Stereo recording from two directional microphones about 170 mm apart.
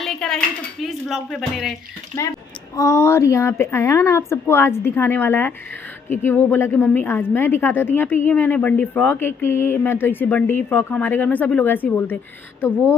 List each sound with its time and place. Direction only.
0.0 s dishes: 5° left (ahead or behind)
0.8 s speech: centre (ahead or behind)
2.7 s speech: 15° left (ahead or behind)